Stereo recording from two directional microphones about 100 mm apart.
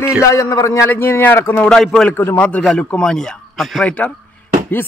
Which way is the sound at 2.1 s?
20° left (ahead or behind).